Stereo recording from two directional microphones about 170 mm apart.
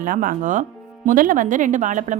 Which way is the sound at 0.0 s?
55° right (ahead or behind).